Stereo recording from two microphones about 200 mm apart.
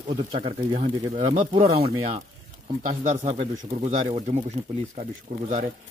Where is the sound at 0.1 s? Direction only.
30° right (ahead or behind).